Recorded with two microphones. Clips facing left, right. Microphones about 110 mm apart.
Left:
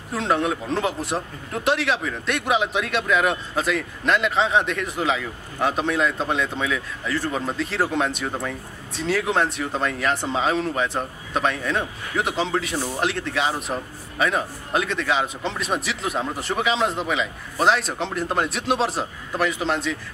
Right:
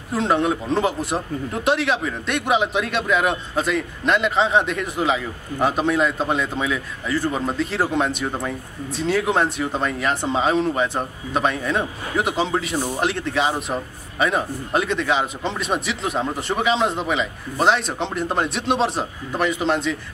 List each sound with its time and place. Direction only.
0.1 s a man's voice: centre (ahead or behind)
12.7 s speech: 15° right (ahead or behind)
13.0 s a man's voice: centre (ahead or behind)